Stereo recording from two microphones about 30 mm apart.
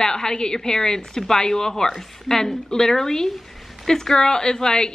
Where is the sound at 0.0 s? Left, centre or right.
Left.